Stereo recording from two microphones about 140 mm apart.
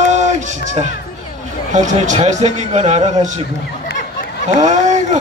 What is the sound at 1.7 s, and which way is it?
A man's voice, 60° right (ahead or behind).